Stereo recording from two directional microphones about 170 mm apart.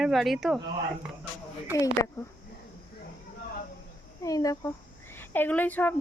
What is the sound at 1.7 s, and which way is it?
Speech, 20° left (ahead or behind).